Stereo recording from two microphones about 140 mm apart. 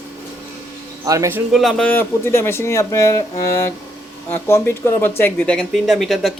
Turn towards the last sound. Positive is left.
turn(degrees=0)  # may be behind; listen again after turning